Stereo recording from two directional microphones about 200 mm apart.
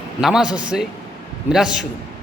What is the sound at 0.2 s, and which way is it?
A man's voice, centre (ahead or behind).